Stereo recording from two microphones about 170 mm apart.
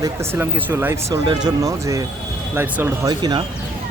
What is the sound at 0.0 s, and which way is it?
Speech, 15° right (ahead or behind).